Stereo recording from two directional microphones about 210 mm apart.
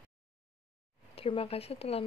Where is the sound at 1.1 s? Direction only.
25° left (ahead or behind).